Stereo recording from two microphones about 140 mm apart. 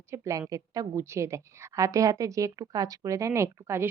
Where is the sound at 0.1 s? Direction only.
25° right (ahead or behind).